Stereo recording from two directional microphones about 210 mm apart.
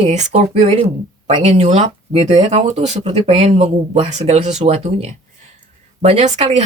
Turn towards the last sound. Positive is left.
turn(degrees=-30)  # may be behind; listen again after turning